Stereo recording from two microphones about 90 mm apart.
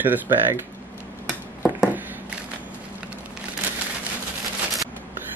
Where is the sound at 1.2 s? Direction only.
10° right (ahead or behind).